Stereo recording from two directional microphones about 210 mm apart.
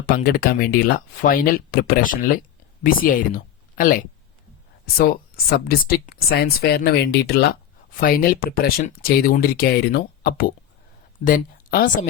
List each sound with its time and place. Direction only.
0.0 s speech: 45° left (ahead or behind)